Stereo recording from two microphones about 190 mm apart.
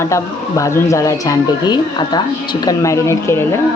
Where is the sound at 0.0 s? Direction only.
15° left (ahead or behind).